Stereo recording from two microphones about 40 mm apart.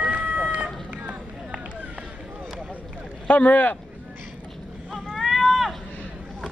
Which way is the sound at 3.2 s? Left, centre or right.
Left.